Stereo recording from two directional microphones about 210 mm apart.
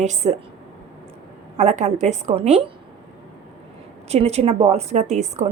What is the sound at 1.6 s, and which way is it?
Speech, 35° right (ahead or behind).